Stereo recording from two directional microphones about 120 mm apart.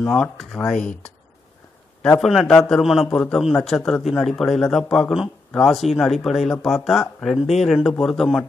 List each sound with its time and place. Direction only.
0.0 s speech: 15° left (ahead or behind)
0.4 s speech: 5° left (ahead or behind)
2.1 s speech: 5° left (ahead or behind)